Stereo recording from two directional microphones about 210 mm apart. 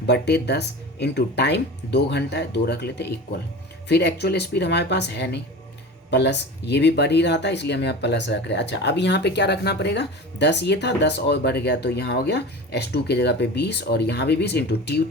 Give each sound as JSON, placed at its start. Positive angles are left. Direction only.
{"t": 0.1, "sound": "speech", "side_deg": 55}